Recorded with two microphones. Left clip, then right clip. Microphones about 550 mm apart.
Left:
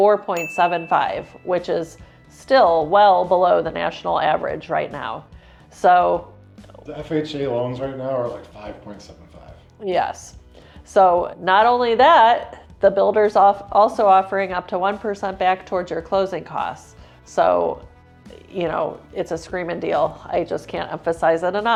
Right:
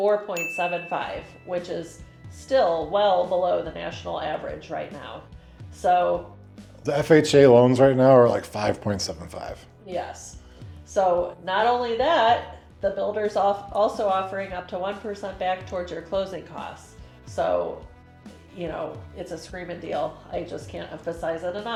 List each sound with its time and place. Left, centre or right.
0.0 s speech: left
5.8 s speech: left
6.8 s speech: right
10.9 s speech: left
18.6 s speech: left